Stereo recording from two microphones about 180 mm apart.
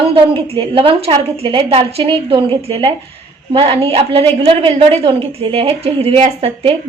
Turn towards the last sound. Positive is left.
turn(degrees=-30)  # may be behind; listen again after turning